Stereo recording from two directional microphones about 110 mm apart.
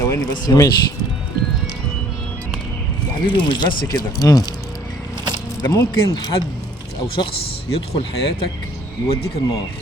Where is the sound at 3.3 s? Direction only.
45° left (ahead or behind).